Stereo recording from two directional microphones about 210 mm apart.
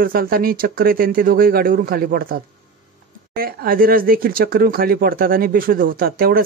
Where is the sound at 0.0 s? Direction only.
45° right (ahead or behind).